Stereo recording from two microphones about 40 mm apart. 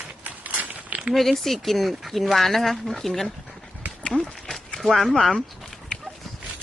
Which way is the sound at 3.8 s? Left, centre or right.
Right.